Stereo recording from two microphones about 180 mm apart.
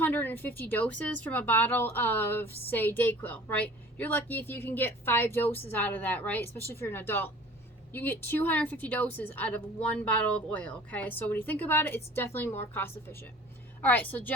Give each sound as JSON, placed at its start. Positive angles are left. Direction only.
{"t": 0.0, "sound": "speech", "side_deg": 10}